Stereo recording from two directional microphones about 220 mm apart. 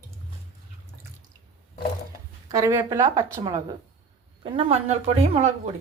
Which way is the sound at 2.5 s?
15° right (ahead or behind).